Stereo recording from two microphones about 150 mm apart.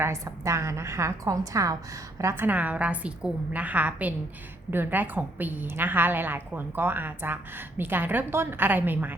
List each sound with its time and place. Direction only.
0.0 s a woman's voice: 20° right (ahead or behind)